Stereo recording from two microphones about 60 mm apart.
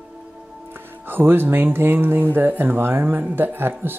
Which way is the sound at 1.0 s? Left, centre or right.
Right.